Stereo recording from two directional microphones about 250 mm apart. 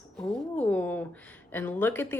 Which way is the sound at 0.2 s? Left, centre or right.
Centre.